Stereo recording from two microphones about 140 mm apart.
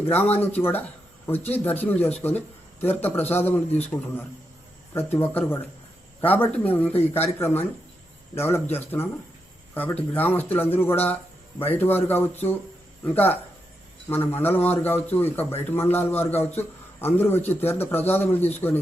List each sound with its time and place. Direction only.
0.3 s a man's voice: 15° left (ahead or behind)
3.7 s speech: 50° left (ahead or behind)
4.9 s a man's voice: 15° left (ahead or behind)